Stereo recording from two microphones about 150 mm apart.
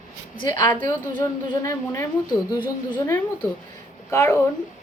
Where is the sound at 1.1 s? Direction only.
30° left (ahead or behind).